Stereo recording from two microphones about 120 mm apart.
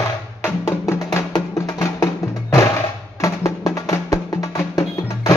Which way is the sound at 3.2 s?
30° left (ahead or behind).